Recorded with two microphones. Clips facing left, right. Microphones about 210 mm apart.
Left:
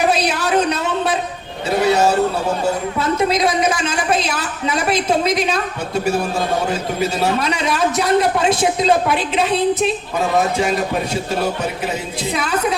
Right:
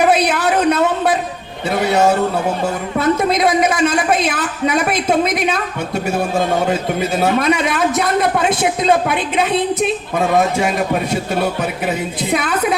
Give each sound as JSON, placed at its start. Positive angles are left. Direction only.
{"t": 0.1, "sound": "a sound", "side_deg": -50}
{"t": 3.0, "sound": "a woman's voice", "side_deg": -50}
{"t": 7.2, "sound": "a woman's voice", "side_deg": -50}
{"t": 12.3, "sound": "a woman's voice", "side_deg": -55}